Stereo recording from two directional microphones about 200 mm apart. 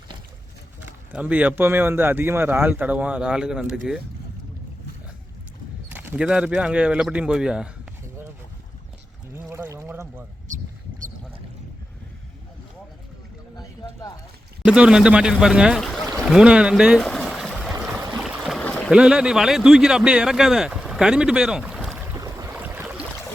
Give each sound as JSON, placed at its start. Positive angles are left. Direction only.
{"t": 1.1, "sound": "speech", "side_deg": -5}
{"t": 5.9, "sound": "a man's voice", "side_deg": -10}
{"t": 9.5, "sound": "a sound", "side_deg": -10}
{"t": 14.6, "sound": "a man's voice", "side_deg": -5}
{"t": 16.1, "sound": "boat", "side_deg": 0}
{"t": 17.7, "sound": "stream", "side_deg": -15}
{"t": 18.2, "sound": "a sound", "side_deg": 0}
{"t": 18.9, "sound": "a man's voice", "side_deg": -5}
{"t": 22.0, "sound": "boat", "side_deg": -15}